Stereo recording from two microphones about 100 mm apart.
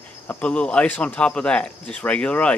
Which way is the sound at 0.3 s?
10° left (ahead or behind).